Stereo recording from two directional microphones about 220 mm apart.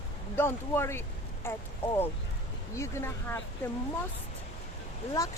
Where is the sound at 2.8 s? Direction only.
10° left (ahead or behind).